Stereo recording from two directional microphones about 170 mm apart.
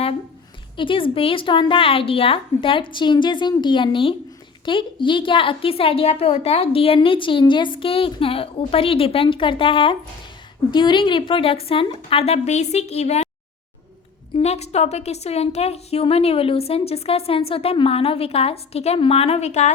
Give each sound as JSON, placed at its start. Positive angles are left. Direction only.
{"t": 0.8, "sound": "a woman's voice", "side_deg": 30}
{"t": 14.3, "sound": "a woman's voice", "side_deg": 40}